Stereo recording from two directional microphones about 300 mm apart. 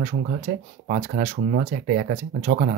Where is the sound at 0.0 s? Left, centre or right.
Right.